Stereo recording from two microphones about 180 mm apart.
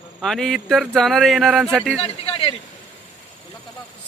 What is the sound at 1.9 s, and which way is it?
Speech, 35° left (ahead or behind).